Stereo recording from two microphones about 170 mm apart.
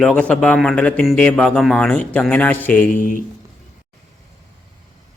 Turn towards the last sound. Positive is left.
turn(degrees=55)  # may be behind; listen again after turning